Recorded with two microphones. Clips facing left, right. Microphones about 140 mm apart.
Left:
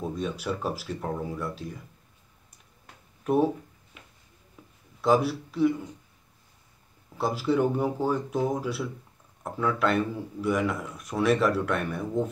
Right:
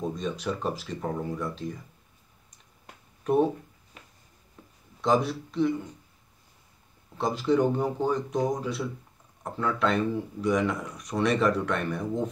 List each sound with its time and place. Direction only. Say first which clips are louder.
0.1 s speech: even; 5° left (ahead or behind)
3.3 s speech: even; 5° left (ahead or behind)
3.9 s a sound: right 1 dB; 40° right (ahead or behind)
4.6 s a sound: even; 10° left (ahead or behind)
5.0 s speech: left 2 dB; 5° left (ahead or behind)
7.2 s speech: right 1 dB; 5° left (ahead or behind)